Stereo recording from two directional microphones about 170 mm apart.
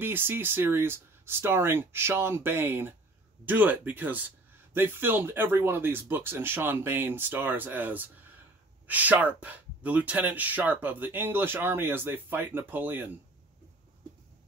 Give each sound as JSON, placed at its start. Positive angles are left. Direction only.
{"t": 0.0, "sound": "speech", "side_deg": -15}